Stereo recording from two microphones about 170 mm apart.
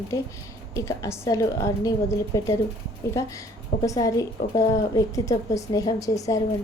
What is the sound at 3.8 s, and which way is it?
A woman's voice, 20° left (ahead or behind).